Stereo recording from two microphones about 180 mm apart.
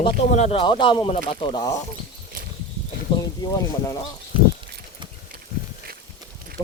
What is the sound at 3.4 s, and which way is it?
Speech, 20° left (ahead or behind).